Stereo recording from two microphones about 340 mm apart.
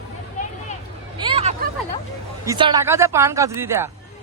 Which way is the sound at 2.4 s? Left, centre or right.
Centre.